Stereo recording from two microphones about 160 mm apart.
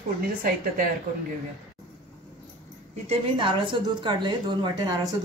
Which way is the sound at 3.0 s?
30° right (ahead or behind).